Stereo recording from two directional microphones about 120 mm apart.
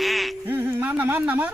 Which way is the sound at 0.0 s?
Centre (ahead or behind).